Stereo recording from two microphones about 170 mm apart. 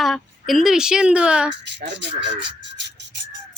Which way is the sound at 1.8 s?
90° right.